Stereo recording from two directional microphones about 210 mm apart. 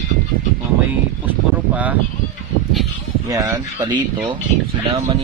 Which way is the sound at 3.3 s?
15° right (ahead or behind).